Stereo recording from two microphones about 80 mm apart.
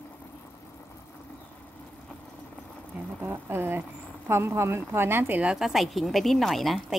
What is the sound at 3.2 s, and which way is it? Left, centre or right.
A woman's voice, right.